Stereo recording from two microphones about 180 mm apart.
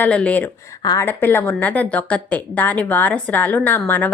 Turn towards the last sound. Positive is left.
turn(degrees=10)  # may be behind; listen again after turning